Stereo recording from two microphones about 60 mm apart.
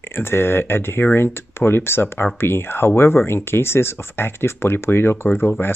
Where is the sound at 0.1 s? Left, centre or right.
Left.